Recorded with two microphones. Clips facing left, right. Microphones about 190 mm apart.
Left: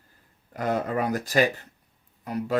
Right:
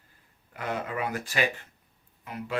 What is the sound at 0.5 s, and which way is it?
Speech, 40° left (ahead or behind).